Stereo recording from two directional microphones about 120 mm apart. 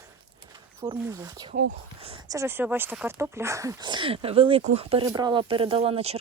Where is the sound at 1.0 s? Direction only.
30° right (ahead or behind).